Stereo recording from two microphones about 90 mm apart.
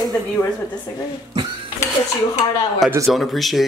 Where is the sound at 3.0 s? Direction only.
Centre (ahead or behind).